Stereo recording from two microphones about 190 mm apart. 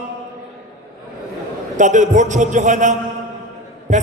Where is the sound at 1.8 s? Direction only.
40° right (ahead or behind).